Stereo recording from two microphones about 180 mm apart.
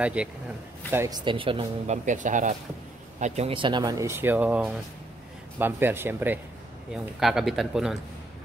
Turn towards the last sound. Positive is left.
turn(degrees=0)  # may be behind; listen again after turning